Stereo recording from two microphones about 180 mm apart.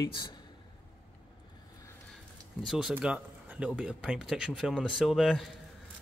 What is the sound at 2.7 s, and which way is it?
Speech, 5° right (ahead or behind).